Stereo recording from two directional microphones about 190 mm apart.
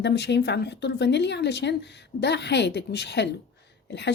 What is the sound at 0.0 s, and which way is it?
Speech, 65° left (ahead or behind).